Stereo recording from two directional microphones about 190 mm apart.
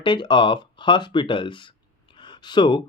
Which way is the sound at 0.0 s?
25° left (ahead or behind).